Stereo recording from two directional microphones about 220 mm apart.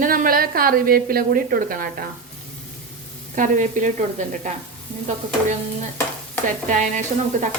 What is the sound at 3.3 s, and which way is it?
Speech, 35° right (ahead or behind).